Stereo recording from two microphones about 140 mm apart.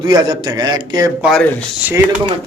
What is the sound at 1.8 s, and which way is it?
Speech, 10° right (ahead or behind).